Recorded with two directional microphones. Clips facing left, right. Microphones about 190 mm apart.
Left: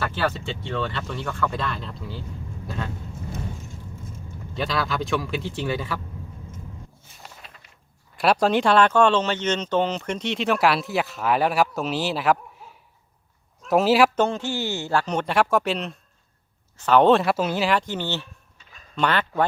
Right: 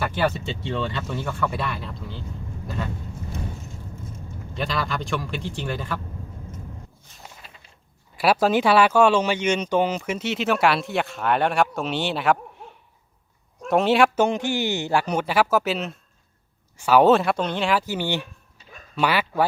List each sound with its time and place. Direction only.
0.0 s speech: 15° right (ahead or behind); by 2.1 s centre (ahead or behind)
2.6 s a sound: centre (ahead or behind)
4.5 s speech: centre (ahead or behind)
8.1 s speech: 5° right (ahead or behind)
14.2 s speech: 15° right (ahead or behind)